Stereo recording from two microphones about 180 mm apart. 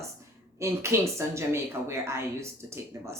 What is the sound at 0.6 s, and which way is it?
Speech, 15° right (ahead or behind).